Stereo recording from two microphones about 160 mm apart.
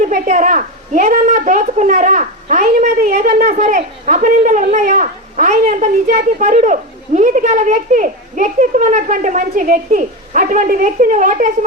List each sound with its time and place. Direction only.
0.0 s a woman's voice: 50° right (ahead or behind)
3.4 s a child's voice: 45° right (ahead or behind)